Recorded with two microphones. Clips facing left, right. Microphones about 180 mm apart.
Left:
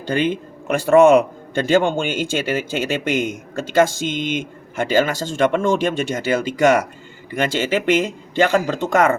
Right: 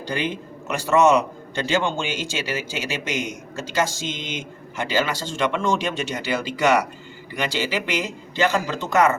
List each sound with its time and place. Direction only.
0.0 s a man's voice: 55° left (ahead or behind)